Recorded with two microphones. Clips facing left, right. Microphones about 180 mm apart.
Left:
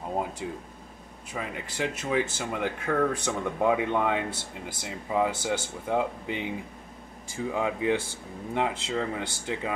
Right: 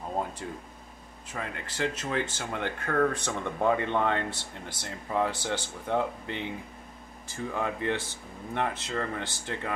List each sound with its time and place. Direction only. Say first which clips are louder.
0.4 s speech: left 3 dB; 10° left (ahead or behind)